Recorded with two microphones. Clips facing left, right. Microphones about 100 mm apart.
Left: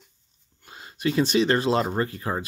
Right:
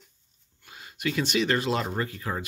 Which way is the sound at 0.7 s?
35° left (ahead or behind).